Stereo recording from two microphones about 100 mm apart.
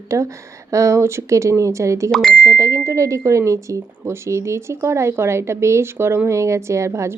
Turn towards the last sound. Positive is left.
turn(degrees=-30)  # may be behind; listen again after turning